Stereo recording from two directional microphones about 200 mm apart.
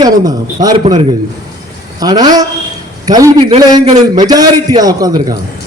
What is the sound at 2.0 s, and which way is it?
A man's voice, 20° right (ahead or behind).